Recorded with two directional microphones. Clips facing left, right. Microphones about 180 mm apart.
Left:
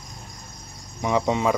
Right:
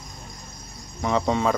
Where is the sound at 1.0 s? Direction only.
15° left (ahead or behind).